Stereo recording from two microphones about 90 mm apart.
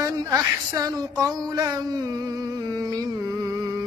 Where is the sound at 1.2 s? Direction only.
45° right (ahead or behind).